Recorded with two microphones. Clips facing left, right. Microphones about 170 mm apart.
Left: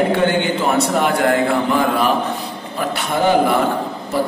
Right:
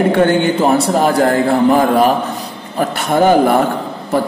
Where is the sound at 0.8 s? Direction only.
35° right (ahead or behind).